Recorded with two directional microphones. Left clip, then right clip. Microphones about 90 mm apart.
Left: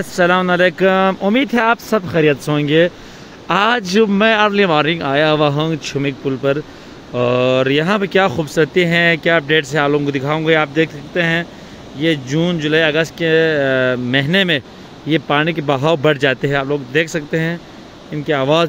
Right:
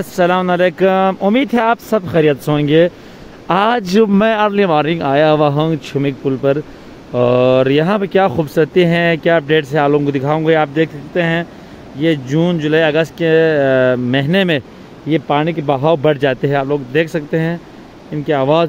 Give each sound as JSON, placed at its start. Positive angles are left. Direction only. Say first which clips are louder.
{"t": 0.0, "sound": "speech", "louder": "even", "side_deg": -25}
{"t": 3.8, "sound": "a man's voice", "louder": "right 1 dB", "side_deg": -85}
{"t": 15.0, "sound": "speech", "louder": "even", "side_deg": -20}
{"t": 16.1, "sound": "speech", "louder": "right 1 dB", "side_deg": -45}